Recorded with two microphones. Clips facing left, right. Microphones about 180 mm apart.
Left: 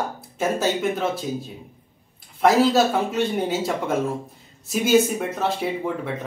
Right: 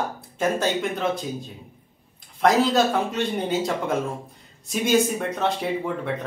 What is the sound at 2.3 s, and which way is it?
Speech, 5° left (ahead or behind).